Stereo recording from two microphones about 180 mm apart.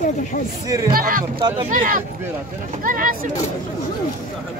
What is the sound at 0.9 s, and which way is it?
Speech, 50° right (ahead or behind).